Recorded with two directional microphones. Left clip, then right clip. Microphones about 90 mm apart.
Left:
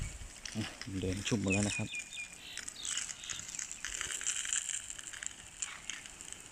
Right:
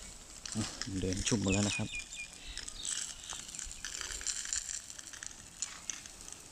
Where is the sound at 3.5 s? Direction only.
30° left (ahead or behind).